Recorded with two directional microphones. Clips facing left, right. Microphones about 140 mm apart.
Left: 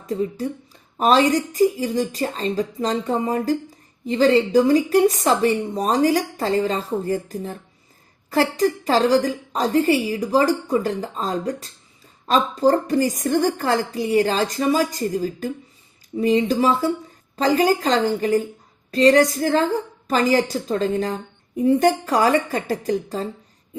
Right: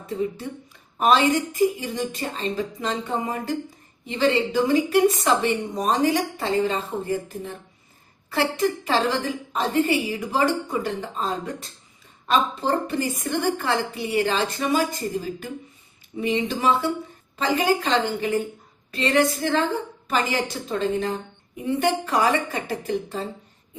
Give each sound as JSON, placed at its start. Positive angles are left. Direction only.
{"t": 0.1, "sound": "a woman's voice", "side_deg": 35}